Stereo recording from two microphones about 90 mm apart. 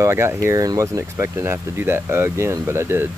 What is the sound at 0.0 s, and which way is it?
Speech, 30° right (ahead or behind).